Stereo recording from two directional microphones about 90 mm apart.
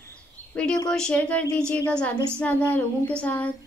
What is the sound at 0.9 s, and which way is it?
A woman's voice, 10° left (ahead or behind).